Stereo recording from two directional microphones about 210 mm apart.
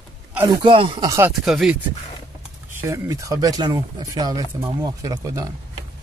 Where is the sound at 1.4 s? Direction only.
Centre (ahead or behind).